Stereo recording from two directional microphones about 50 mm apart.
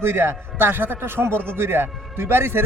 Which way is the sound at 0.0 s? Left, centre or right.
Right.